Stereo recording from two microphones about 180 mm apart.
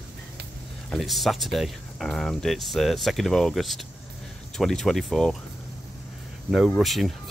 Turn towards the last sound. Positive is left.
turn(degrees=0)  # may be behind; listen again after turning